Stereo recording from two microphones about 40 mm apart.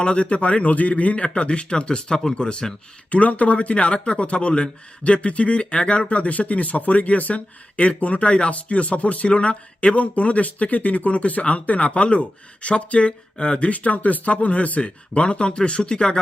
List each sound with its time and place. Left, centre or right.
0.0 s speech: left
3.1 s speech: left